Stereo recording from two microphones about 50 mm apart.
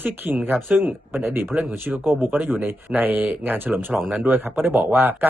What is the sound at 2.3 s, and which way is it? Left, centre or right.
A man's voice, right.